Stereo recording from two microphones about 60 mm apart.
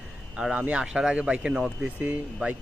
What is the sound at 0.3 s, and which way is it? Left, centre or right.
A man's voice, centre.